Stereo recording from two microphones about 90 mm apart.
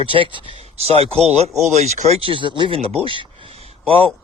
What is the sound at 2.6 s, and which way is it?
Speech, 90° right.